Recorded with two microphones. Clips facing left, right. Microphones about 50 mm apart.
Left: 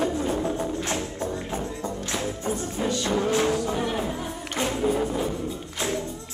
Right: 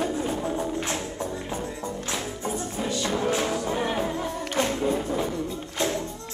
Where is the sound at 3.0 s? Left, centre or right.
Right.